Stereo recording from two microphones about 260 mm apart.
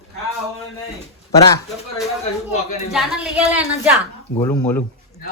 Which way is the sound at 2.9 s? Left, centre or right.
Centre.